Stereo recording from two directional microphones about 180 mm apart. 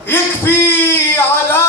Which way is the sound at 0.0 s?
10° left (ahead or behind).